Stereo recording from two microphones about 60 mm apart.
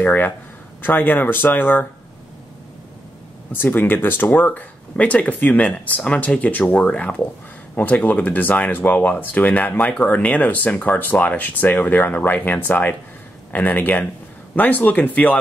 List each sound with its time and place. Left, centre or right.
0.0 s speech: left
3.5 s speech: left